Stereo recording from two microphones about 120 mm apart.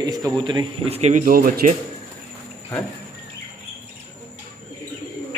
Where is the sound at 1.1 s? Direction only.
90° right.